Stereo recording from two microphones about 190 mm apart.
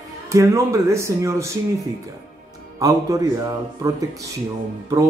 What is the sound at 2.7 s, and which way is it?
Speech, 20° right (ahead or behind).